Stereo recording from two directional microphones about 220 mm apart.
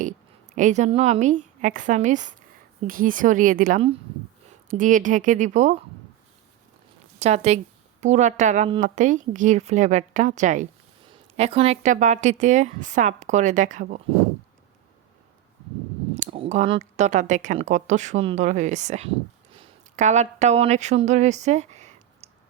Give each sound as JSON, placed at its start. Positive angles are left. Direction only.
{"t": 0.5, "sound": "speech", "side_deg": -35}
{"t": 7.2, "sound": "speech", "side_deg": -30}
{"t": 16.1, "sound": "speech", "side_deg": -30}